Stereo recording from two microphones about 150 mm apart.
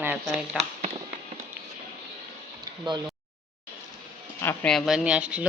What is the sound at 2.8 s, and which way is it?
Speech, 30° right (ahead or behind).